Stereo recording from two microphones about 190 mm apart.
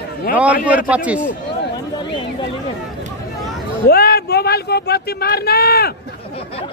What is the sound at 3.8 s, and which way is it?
Speech, 55° left (ahead or behind).